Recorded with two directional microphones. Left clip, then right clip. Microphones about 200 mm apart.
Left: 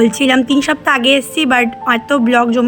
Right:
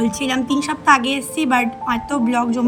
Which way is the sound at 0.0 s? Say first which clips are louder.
Left 9 dB; 15° left (ahead or behind).